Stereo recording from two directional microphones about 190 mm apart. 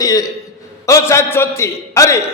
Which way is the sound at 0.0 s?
20° left (ahead or behind).